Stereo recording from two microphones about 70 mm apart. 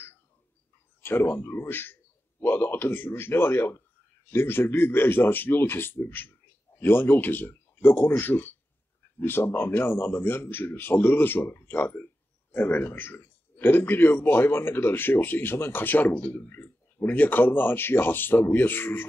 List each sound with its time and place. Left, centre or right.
1.0 s speech: left